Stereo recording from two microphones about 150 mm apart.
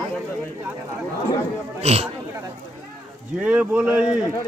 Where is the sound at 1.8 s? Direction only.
45° right (ahead or behind).